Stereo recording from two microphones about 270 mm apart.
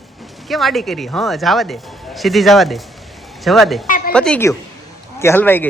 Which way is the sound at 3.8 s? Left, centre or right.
Left.